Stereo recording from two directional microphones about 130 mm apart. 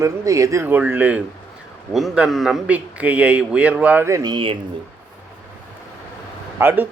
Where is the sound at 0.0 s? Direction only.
25° right (ahead or behind).